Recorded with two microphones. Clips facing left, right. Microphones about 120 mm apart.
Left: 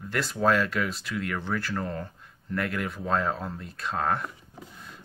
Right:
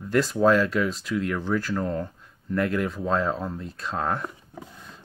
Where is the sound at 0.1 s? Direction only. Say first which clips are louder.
Right 8 dB; 40° right (ahead or behind).